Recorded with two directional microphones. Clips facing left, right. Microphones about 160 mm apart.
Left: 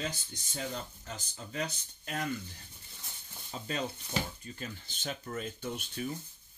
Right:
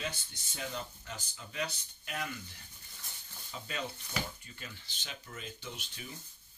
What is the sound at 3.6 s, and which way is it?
Speech, 35° left (ahead or behind).